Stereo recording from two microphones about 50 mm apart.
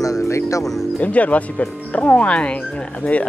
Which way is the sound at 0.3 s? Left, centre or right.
Left.